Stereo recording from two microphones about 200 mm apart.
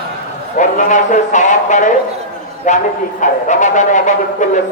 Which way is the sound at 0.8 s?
40° left (ahead or behind).